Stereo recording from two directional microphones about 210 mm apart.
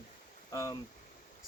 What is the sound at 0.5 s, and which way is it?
Speech, 15° left (ahead or behind).